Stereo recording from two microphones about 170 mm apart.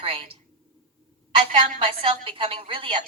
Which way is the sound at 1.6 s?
30° right (ahead or behind).